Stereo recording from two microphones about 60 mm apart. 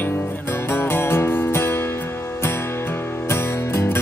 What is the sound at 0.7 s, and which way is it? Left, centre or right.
Music, left.